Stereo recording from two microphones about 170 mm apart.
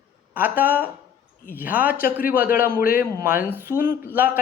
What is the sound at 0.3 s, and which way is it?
Speech, 10° right (ahead or behind).